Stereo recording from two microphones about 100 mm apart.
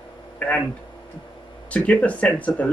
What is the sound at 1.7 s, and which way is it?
Speech, 15° left (ahead or behind).